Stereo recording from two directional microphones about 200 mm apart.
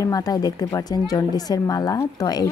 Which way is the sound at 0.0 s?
20° left (ahead or behind).